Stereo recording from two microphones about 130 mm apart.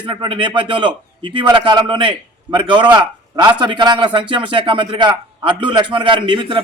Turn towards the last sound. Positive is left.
turn(degrees=-35)  # may be behind; listen again after turning